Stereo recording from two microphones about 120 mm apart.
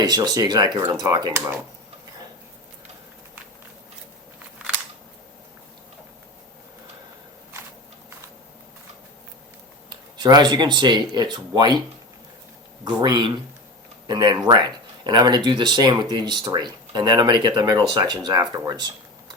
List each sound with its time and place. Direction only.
0.0 s speech: 35° right (ahead or behind)
10.2 s speech: 35° right (ahead or behind)
12.8 s speech: 40° right (ahead or behind)